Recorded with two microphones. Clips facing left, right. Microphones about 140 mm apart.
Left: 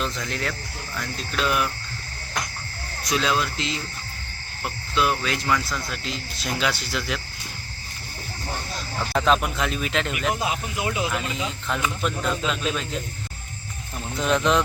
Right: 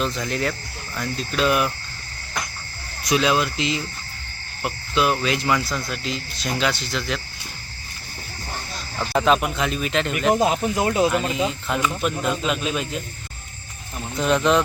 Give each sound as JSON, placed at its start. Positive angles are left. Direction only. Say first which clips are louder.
{"t": 0.0, "sound": "speech", "louder": "right 4 dB", "side_deg": -5}
{"t": 3.2, "sound": "speech", "louder": "right 3 dB", "side_deg": -10}
{"t": 5.9, "sound": "speech", "louder": "right 3 dB", "side_deg": 0}
{"t": 9.0, "sound": "speech", "louder": "right 2 dB", "side_deg": -5}
{"t": 10.3, "sound": "speech", "louder": "right 8 dB", "side_deg": -45}
{"t": 11.7, "sound": "speech", "louder": "right 3 dB", "side_deg": -10}
{"t": 14.2, "sound": "speech", "louder": "right 3 dB", "side_deg": 0}